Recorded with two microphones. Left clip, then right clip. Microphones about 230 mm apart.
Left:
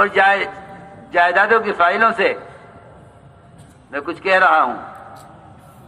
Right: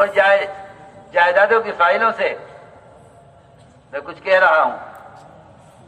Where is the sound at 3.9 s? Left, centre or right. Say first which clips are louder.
Even; left.